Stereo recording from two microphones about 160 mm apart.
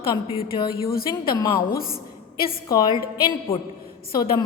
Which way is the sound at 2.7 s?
25° left (ahead or behind).